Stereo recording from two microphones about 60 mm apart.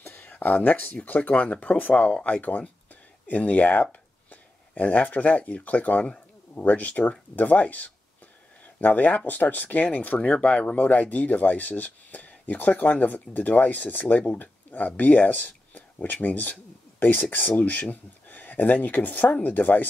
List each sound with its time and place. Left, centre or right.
0.0 s speech: left